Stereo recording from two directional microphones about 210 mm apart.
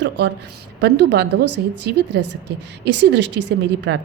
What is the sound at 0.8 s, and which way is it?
Speech, 55° right (ahead or behind).